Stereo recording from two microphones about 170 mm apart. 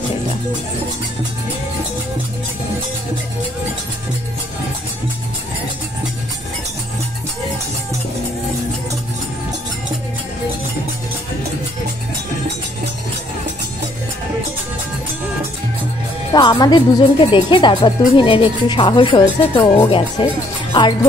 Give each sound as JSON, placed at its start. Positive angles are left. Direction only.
{"t": 16.3, "sound": "speech", "side_deg": 25}